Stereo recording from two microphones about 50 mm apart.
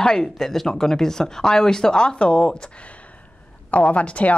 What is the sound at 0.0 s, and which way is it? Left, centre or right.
A woman's voice, centre.